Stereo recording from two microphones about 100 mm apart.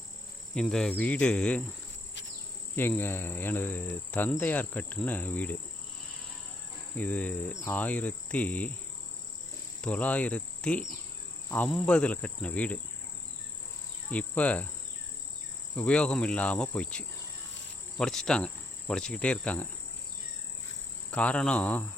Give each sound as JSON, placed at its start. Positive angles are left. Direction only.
{"t": 0.5, "sound": "cricket", "side_deg": 5}
{"t": 2.7, "sound": "cricket", "side_deg": 20}
{"t": 6.9, "sound": "cricket", "side_deg": 15}
{"t": 9.8, "sound": "cricket", "side_deg": 15}
{"t": 14.1, "sound": "cricket", "side_deg": 15}
{"t": 15.7, "sound": "cricket", "side_deg": 10}
{"t": 21.1, "sound": "cricket", "side_deg": 10}